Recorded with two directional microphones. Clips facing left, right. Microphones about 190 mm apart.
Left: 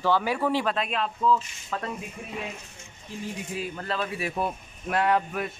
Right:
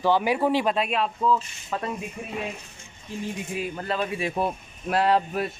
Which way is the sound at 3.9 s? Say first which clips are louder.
Right 3 dB; 20° right (ahead or behind).